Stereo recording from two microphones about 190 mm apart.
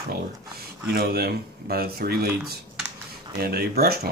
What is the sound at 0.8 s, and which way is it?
Speech, 55° right (ahead or behind).